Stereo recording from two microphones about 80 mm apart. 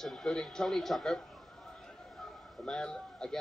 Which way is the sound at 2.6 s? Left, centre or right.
Centre.